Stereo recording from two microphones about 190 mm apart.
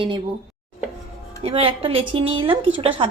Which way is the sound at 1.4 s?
30° right (ahead or behind).